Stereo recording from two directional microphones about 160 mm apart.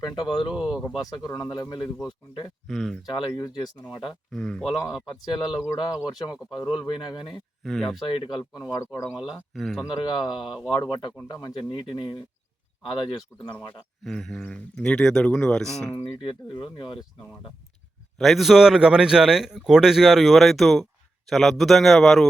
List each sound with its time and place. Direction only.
0.0 s speech: 25° left (ahead or behind)
0.5 s a man's voice: 5° right (ahead or behind)
0.9 s speech: 25° left (ahead or behind)
2.6 s a man's voice: centre (ahead or behind)
3.1 s speech: 25° left (ahead or behind)
4.3 s a man's voice: 5° left (ahead or behind)
5.3 s speech: 25° left (ahead or behind)
7.6 s a man's voice: centre (ahead or behind)
7.9 s speech: 30° left (ahead or behind)
9.3 s a man's voice: centre (ahead or behind)
9.8 s speech: 25° left (ahead or behind)
14.0 s a man's voice: 5° left (ahead or behind)
16.2 s speech: 30° left (ahead or behind)
18.2 s a man's voice: centre (ahead or behind)